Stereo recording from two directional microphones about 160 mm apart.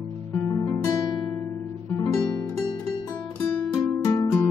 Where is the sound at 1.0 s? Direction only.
30° left (ahead or behind).